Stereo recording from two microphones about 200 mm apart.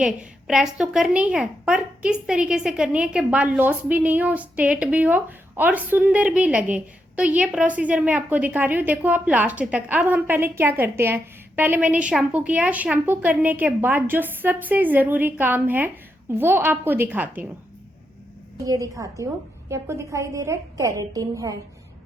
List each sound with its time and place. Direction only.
0.0 s a woman's voice: 5° right (ahead or behind)
18.6 s a woman's voice: 15° right (ahead or behind)